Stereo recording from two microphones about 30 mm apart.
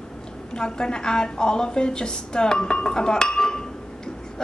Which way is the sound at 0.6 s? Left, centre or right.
Left.